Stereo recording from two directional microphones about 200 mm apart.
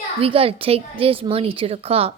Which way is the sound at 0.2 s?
30° right (ahead or behind).